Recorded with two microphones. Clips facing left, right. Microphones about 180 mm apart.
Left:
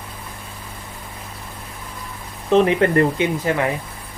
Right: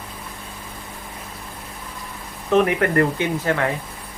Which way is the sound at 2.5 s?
25° left (ahead or behind).